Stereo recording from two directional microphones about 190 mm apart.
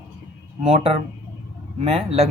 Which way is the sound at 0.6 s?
30° right (ahead or behind).